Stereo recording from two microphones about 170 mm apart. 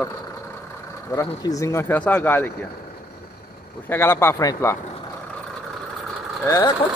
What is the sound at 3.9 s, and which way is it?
Speech, 15° left (ahead or behind).